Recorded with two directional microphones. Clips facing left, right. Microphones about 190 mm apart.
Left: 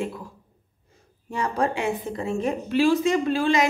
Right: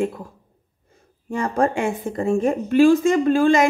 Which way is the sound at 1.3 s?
50° right (ahead or behind).